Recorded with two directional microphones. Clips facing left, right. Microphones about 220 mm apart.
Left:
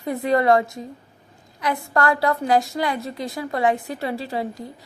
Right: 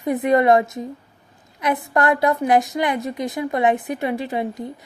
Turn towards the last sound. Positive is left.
turn(degrees=-20)  # may be behind; listen again after turning